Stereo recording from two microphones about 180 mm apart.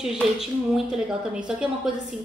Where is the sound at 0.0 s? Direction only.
5° right (ahead or behind).